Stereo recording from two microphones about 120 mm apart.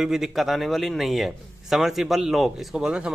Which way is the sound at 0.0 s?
Centre (ahead or behind).